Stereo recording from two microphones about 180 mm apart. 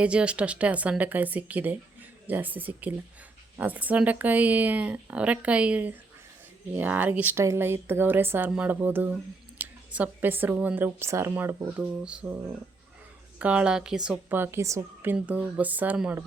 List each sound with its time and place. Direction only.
0.0 s speech: 5° right (ahead or behind)
13.4 s speech: 5° right (ahead or behind)